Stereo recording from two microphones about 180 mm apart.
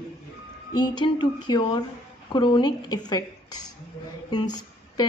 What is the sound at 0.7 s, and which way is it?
A woman's voice, 25° left (ahead or behind).